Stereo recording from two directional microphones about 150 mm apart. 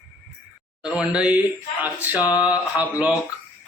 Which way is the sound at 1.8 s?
10° right (ahead or behind).